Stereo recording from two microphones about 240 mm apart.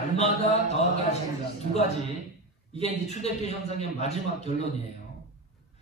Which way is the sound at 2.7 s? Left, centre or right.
Left.